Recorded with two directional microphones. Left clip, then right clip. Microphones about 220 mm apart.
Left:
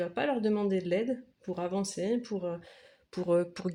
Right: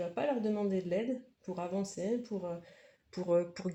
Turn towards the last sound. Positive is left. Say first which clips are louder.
# left 3 dB
turn(degrees=35)  # may be behind; listen again after turning